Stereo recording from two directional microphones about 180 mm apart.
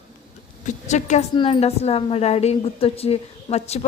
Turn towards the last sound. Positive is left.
turn(degrees=35)  # may be behind; listen again after turning